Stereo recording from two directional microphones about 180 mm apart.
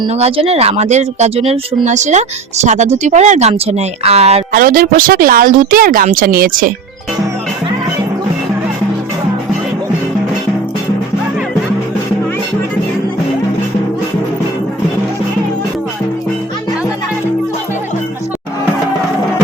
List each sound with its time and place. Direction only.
0.1 s speech: 35° right (ahead or behind)
4.5 s a woman's voice: 55° right (ahead or behind)